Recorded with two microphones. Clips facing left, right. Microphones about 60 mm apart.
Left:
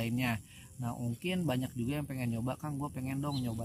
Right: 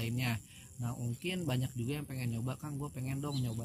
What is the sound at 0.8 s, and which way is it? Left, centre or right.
Cricket, centre.